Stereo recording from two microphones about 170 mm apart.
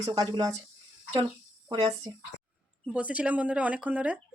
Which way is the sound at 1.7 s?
25° right (ahead or behind).